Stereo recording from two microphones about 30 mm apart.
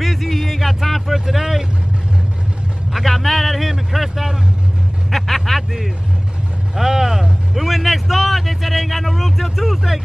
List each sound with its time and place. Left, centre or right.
0.0 s a sound: centre
2.9 s speech: centre
5.1 s vehicle: centre
6.7 s vehicle: centre
7.6 s speech: centre